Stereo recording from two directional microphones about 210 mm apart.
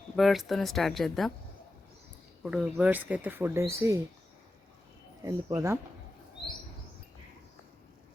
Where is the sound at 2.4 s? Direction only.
5° right (ahead or behind).